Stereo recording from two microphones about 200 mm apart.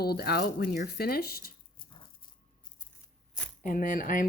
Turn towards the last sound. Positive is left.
turn(degrees=45)  # may be behind; listen again after turning